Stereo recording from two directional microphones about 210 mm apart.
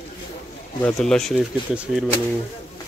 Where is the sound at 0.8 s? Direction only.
5° left (ahead or behind).